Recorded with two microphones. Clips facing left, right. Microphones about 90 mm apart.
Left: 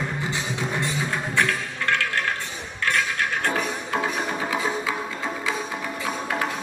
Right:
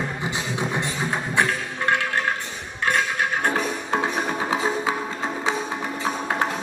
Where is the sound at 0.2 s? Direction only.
20° right (ahead or behind).